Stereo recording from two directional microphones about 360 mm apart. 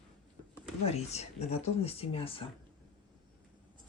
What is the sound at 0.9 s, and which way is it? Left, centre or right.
Speech, centre.